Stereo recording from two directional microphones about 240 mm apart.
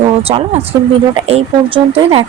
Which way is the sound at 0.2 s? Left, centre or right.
Right.